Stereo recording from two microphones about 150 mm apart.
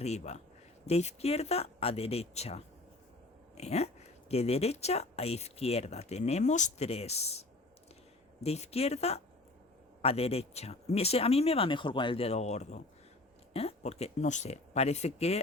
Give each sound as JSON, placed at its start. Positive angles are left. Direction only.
{"t": 0.0, "sound": "speech", "side_deg": 45}